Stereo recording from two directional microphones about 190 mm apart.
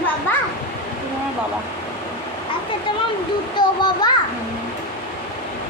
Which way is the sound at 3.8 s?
20° left (ahead or behind).